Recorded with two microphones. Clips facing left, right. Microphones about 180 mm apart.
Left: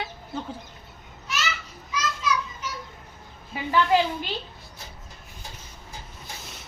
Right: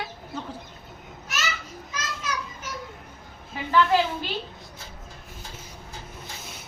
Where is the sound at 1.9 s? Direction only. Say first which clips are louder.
Left 6 dB; 50° right (ahead or behind).